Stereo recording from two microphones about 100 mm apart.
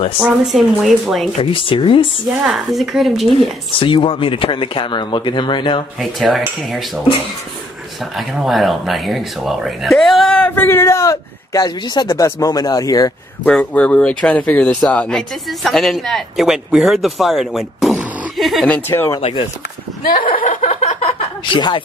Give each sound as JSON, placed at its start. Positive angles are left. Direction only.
{"t": 0.2, "sound": "speech", "side_deg": 0}
{"t": 1.4, "sound": "speech", "side_deg": 60}
{"t": 2.4, "sound": "speech", "side_deg": 0}
{"t": 3.8, "sound": "speech", "side_deg": 60}
{"t": 5.9, "sound": "speech", "side_deg": 0}
{"t": 8.2, "sound": "speech", "side_deg": 0}
{"t": 10.3, "sound": "a man's voice", "side_deg": 20}
{"t": 13.5, "sound": "speech", "side_deg": 10}
{"t": 18.7, "sound": "speech", "side_deg": 25}
{"t": 20.0, "sound": "chuckle", "side_deg": 75}
{"t": 21.5, "sound": "speech", "side_deg": 50}